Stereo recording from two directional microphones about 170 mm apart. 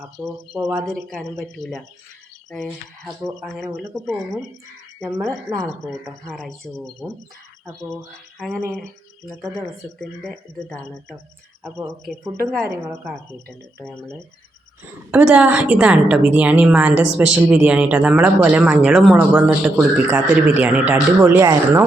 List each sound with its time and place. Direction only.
0.5 s a woman's voice: 10° right (ahead or behind)
1.5 s speech: 5° left (ahead or behind)
5.1 s a woman's voice: 15° right (ahead or behind)
5.6 s speech: 5° left (ahead or behind)
8.4 s speech: 5° left (ahead or behind)
10.0 s speech: 5° left (ahead or behind)
11.6 s a woman's voice: 15° right (ahead or behind)
15.1 s a woman's voice: 5° right (ahead or behind)